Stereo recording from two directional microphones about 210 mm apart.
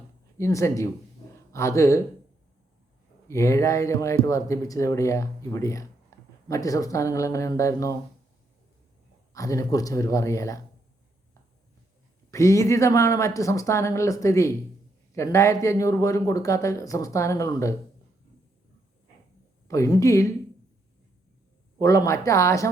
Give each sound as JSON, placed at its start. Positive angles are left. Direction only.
{"t": 0.3, "sound": "speech", "side_deg": 15}
{"t": 3.2, "sound": "speech", "side_deg": 15}
{"t": 9.3, "sound": "speech", "side_deg": 15}
{"t": 12.3, "sound": "speech", "side_deg": 15}
{"t": 19.6, "sound": "speech", "side_deg": 15}
{"t": 21.8, "sound": "speech", "side_deg": 15}